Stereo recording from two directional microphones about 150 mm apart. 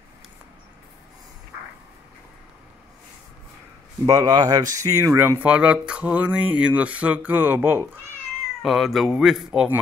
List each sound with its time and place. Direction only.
4.0 s speech: 25° right (ahead or behind)
5.4 s speech: 10° right (ahead or behind)
8.6 s speech: centre (ahead or behind)